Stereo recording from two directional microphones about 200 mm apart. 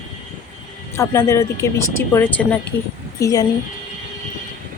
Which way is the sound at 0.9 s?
15° left (ahead or behind).